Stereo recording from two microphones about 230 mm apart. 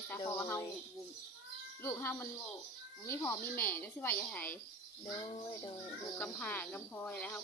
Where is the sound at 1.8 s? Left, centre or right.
Centre.